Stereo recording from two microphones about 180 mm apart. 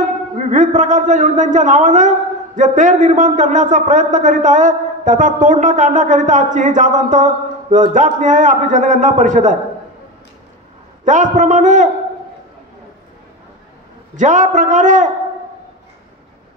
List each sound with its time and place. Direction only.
0.4 s a man's voice: 45° right (ahead or behind)
11.1 s a man's voice: 45° right (ahead or behind)
14.1 s a man's voice: 45° right (ahead or behind)